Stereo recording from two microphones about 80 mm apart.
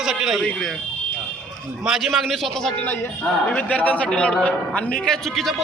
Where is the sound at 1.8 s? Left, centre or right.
Centre.